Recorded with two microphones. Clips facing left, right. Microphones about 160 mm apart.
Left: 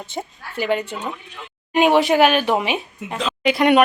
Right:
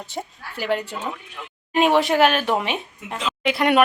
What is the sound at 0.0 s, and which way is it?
Speech, centre (ahead or behind).